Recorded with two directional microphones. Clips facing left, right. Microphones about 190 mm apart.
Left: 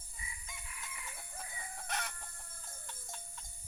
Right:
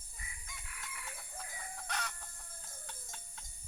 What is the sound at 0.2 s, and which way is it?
Chicken, 60° right (ahead or behind).